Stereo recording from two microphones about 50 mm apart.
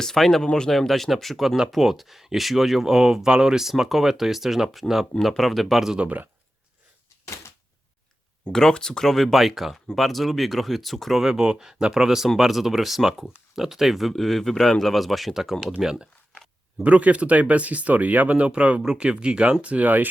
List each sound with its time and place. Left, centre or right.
0.0 s speech: centre
6.0 s speech: right
8.5 s speech: centre
16.8 s speech: right
19.6 s speech: right